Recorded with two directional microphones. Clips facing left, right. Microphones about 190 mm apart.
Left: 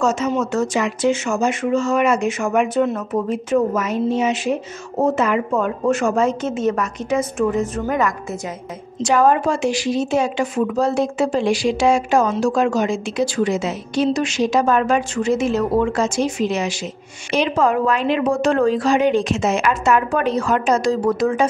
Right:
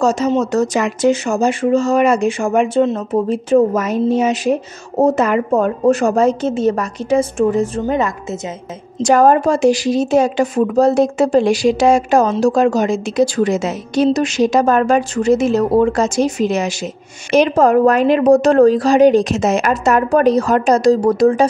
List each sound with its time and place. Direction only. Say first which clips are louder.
0.0 s a woman's voice: right 4 dB; 35° right (ahead or behind)
9.0 s speech: right 4 dB; 40° right (ahead or behind)